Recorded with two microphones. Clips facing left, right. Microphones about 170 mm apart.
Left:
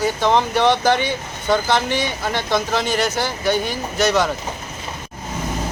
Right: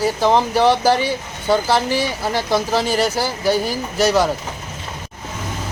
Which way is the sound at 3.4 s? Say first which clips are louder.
Right 2 dB; 35° right (ahead or behind).